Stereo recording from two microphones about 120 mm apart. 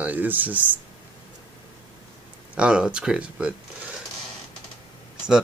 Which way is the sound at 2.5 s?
10° right (ahead or behind).